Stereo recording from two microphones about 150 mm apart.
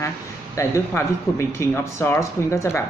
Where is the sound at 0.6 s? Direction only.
20° left (ahead or behind).